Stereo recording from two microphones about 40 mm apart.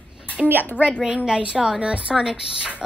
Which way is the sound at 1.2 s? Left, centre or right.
Right.